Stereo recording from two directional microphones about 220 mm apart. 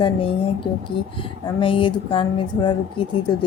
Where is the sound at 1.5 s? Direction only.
25° left (ahead or behind).